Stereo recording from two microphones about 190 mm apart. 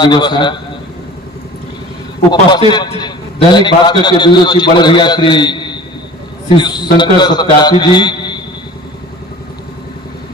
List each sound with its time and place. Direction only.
0.0 s a man's voice: 25° left (ahead or behind)
2.3 s a man's voice: 25° left (ahead or behind)